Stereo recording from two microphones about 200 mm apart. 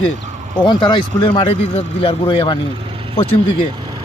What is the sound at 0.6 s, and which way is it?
A man's voice, 20° left (ahead or behind).